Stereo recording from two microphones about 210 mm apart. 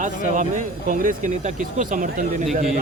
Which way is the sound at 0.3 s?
40° right (ahead or behind).